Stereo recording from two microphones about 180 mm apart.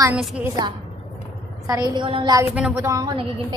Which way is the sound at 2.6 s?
10° right (ahead or behind).